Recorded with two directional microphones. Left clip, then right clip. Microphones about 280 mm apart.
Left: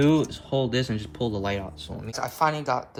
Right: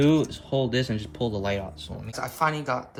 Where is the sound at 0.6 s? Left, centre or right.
Centre.